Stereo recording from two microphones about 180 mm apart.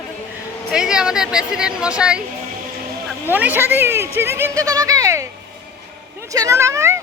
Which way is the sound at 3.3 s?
10° right (ahead or behind).